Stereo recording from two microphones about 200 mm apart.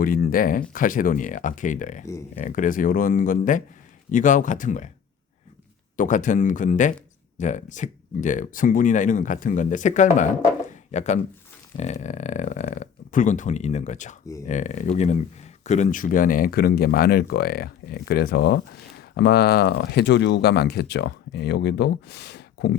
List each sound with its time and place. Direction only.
0.0 s speech: 45° left (ahead or behind)
6.0 s speech: 40° left (ahead or behind)
10.7 s a sound: 35° left (ahead or behind)
11.8 s speech: 35° left (ahead or behind); by 22.7 s 55° left (ahead or behind)